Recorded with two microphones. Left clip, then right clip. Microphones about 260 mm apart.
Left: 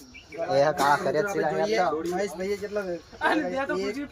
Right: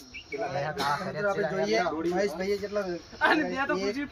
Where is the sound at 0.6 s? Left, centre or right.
Left.